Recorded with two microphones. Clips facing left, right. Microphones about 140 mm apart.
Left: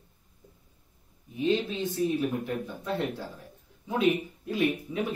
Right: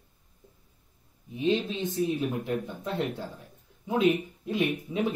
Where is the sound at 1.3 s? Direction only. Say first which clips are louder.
Even; 20° right (ahead or behind).